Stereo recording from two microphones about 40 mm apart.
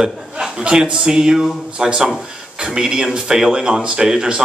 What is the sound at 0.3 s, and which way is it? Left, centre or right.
A man's voice, centre.